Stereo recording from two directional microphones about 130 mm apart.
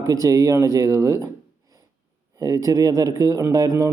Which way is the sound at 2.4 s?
25° right (ahead or behind).